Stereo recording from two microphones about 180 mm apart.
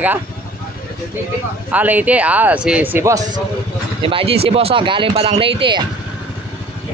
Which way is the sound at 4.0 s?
30° right (ahead or behind).